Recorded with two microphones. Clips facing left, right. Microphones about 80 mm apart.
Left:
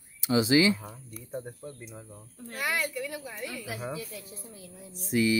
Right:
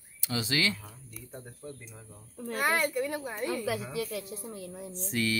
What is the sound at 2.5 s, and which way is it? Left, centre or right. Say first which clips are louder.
Speech: right 3 dB; right.